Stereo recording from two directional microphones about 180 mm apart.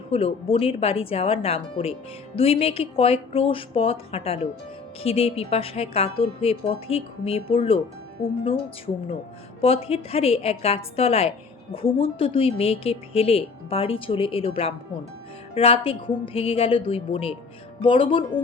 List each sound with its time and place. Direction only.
0.1 s a woman's voice: 30° left (ahead or behind)
9.6 s a woman's voice: 30° left (ahead or behind)